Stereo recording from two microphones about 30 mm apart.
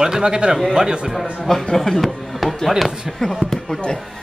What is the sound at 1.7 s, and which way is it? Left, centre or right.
Speech, centre.